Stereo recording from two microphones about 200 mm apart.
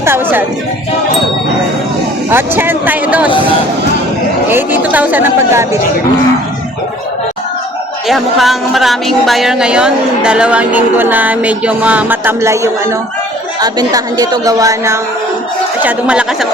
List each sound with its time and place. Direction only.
0.0 s speech: 10° right (ahead or behind)
2.3 s a woman's voice: 10° right (ahead or behind)
4.4 s a woman's voice: 10° right (ahead or behind)
8.0 s a woman's voice: centre (ahead or behind)